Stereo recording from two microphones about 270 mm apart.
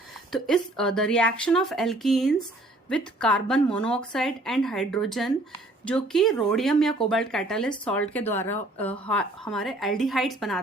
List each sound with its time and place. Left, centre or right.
0.3 s speech: centre